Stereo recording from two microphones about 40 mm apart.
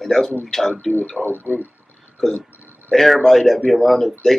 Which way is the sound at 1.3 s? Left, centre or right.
Right.